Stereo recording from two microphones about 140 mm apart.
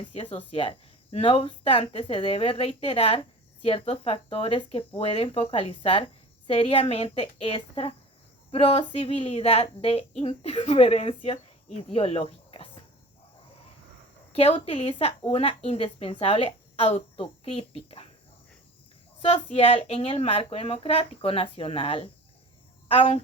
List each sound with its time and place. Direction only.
0.1 s speech: 45° left (ahead or behind)
14.3 s speech: 45° left (ahead or behind)
19.2 s speech: 45° left (ahead or behind)